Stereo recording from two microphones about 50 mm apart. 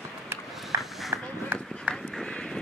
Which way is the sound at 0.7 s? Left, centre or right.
Right.